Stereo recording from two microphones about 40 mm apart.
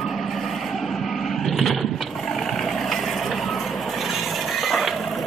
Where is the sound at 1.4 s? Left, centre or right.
Centre.